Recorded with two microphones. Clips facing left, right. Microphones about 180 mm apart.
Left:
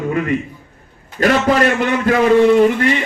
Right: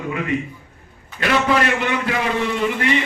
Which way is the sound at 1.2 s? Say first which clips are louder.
Left 5 dB; 45° left (ahead or behind).